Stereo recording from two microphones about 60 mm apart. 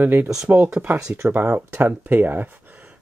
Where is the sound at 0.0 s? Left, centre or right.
Right.